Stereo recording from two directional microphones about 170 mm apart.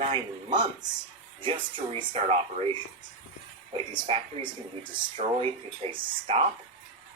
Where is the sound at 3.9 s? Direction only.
30° right (ahead or behind).